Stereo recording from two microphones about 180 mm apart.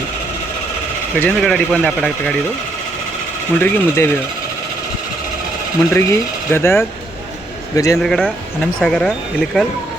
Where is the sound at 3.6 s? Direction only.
10° left (ahead or behind).